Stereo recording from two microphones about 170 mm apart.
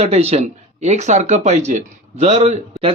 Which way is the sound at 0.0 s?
40° right (ahead or behind).